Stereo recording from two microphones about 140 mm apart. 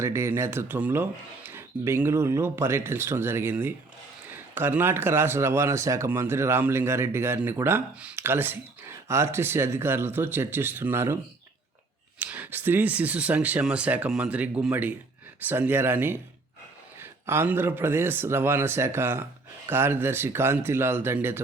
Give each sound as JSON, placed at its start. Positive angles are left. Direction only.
{"t": 0.0, "sound": "speech", "side_deg": -20}
{"t": 12.2, "sound": "speech", "side_deg": -15}